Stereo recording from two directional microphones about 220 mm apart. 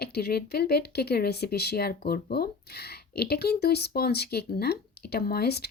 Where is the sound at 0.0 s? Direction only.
45° left (ahead or behind).